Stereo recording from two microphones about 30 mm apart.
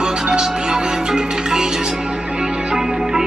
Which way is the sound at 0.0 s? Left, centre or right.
Right.